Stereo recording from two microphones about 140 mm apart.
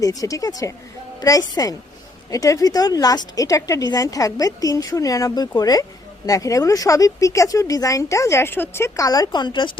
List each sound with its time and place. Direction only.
0.0 s speech: 25° left (ahead or behind)